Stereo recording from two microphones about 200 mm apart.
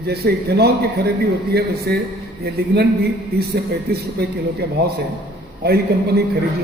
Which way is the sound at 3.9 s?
55° right (ahead or behind).